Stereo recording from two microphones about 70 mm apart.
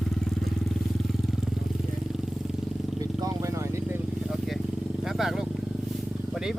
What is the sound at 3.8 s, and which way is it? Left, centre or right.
Vehicle, right.